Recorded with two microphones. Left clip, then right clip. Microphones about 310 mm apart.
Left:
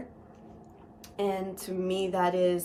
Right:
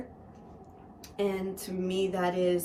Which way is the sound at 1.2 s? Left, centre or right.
Centre.